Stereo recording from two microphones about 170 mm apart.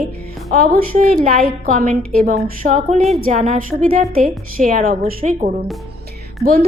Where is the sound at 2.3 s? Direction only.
45° right (ahead or behind).